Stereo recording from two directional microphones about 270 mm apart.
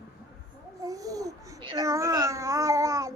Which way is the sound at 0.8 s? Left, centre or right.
Centre.